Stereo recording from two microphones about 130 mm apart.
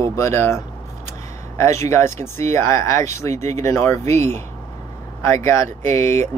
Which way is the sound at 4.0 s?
65° right (ahead or behind).